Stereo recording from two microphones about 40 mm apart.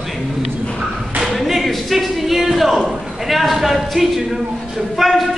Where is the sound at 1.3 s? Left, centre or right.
Centre.